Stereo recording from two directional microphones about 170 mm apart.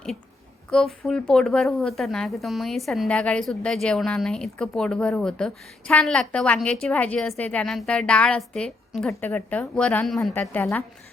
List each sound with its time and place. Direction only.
0.7 s a woman's voice: centre (ahead or behind)